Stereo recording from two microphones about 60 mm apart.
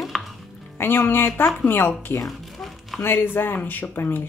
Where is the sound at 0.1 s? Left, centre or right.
Centre.